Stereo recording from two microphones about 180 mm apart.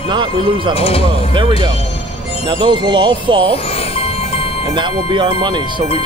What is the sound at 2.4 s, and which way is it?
Speech, 25° right (ahead or behind).